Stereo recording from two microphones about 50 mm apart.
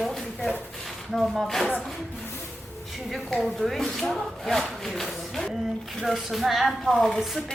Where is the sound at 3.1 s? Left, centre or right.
Centre.